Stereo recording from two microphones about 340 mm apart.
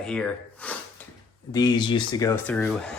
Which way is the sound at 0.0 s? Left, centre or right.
Centre.